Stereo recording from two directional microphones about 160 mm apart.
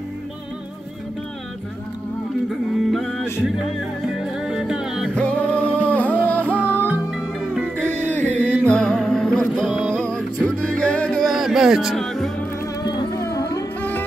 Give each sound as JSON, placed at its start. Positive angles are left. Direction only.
{"t": 2.9, "sound": "music", "side_deg": 0}
{"t": 5.1, "sound": "music", "side_deg": 5}
{"t": 6.9, "sound": "music", "side_deg": -5}
{"t": 7.7, "sound": "music", "side_deg": 10}
{"t": 12.8, "sound": "music", "side_deg": 25}
{"t": 13.7, "sound": "sitar", "side_deg": 10}